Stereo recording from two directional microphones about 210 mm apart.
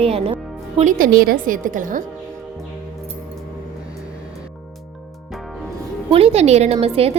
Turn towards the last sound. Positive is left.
turn(degrees=-30)  # may be behind; listen again after turning